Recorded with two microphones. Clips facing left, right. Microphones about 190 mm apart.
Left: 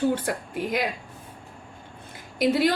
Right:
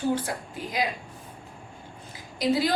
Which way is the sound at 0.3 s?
55° left (ahead or behind).